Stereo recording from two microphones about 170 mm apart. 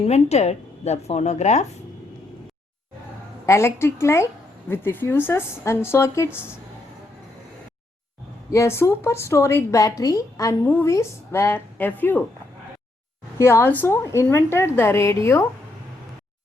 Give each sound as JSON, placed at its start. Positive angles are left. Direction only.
{"t": 0.0, "sound": "speech", "side_deg": 40}
{"t": 3.4, "sound": "a woman's voice", "side_deg": 15}
{"t": 8.5, "sound": "a woman's voice", "side_deg": 15}
{"t": 13.4, "sound": "a woman's voice", "side_deg": 15}